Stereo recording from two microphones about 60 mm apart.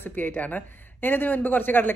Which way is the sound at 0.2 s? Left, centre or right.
Left.